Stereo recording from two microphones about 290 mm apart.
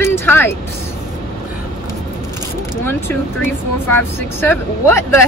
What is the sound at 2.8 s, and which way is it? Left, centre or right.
Speech, centre.